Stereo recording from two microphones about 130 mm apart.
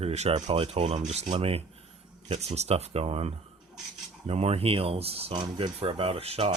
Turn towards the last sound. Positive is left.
turn(degrees=-50)  # may be behind; listen again after turning